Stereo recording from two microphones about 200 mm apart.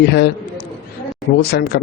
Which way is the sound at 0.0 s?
55° left (ahead or behind).